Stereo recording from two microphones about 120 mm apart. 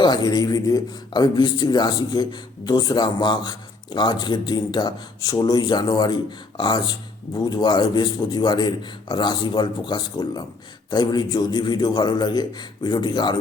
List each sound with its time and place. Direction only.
0.0 s speech: 35° left (ahead or behind)